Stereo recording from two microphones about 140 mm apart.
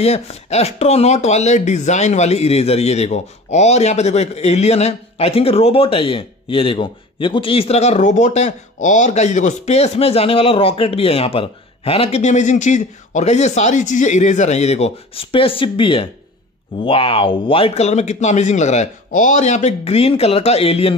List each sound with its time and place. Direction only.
0.0 s speech: 50° left (ahead or behind)